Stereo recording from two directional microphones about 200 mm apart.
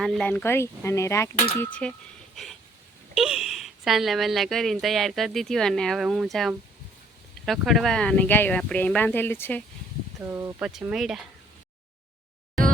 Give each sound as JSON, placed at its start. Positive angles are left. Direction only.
{"t": 0.0, "sound": "speech", "side_deg": 5}
{"t": 2.3, "sound": "vehicle", "side_deg": 0}
{"t": 3.2, "sound": "speech", "side_deg": 0}
{"t": 10.2, "sound": "speech", "side_deg": -10}